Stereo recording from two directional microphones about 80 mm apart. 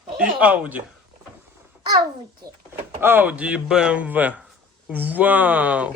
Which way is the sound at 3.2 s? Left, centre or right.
Centre.